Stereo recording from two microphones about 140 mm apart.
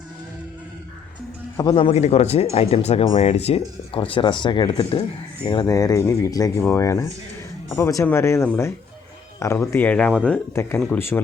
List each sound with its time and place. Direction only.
1.7 s speech: 50° left (ahead or behind)
3.9 s speech: 40° left (ahead or behind)
5.5 s speech: 25° left (ahead or behind)